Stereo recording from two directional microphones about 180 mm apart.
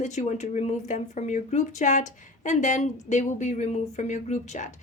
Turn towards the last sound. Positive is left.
turn(degrees=40)  # may be behind; listen again after turning